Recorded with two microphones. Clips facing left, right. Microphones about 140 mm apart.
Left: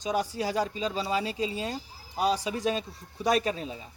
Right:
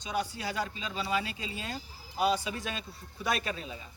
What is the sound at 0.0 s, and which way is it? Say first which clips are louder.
Speech: left 5 dB; 40° left (ahead or behind).